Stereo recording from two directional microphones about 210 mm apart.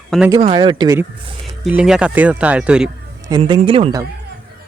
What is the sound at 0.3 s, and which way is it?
Speech, 25° right (ahead or behind).